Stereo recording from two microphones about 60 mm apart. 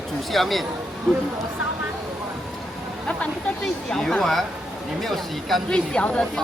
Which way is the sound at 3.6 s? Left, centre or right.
Centre.